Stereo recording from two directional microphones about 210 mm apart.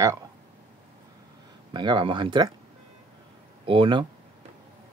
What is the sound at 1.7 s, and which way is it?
Speech, 20° right (ahead or behind).